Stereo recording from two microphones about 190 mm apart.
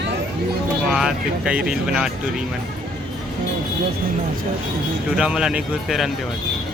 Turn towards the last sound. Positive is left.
turn(degrees=0)  # may be behind; listen again after turning